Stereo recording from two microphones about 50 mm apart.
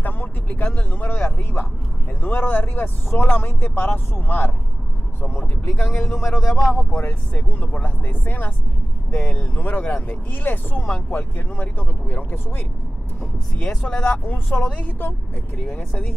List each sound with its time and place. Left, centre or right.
0.0 s vehicle: left
1.4 s speech: left
5.3 s speech: centre
6.9 s speech: left
9.6 s speech: left
11.6 s speech: left
13.8 s speech: left
14.2 s speech: left
14.9 s speech: left